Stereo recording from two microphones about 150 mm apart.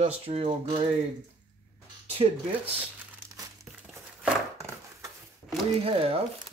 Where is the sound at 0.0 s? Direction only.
40° right (ahead or behind).